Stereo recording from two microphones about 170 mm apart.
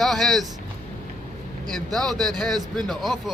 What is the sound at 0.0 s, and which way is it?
Speech, centre (ahead or behind).